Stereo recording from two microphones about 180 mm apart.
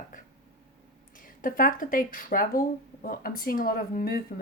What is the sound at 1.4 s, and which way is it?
Speech, 50° left (ahead or behind).